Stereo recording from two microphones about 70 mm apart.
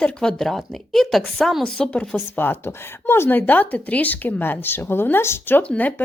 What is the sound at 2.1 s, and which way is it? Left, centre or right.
Speech, left.